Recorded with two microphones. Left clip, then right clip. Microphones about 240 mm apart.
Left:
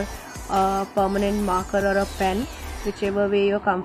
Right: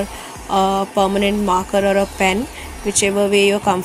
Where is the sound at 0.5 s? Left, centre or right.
Right.